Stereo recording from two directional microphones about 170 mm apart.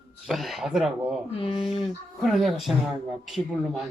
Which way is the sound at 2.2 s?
Centre (ahead or behind).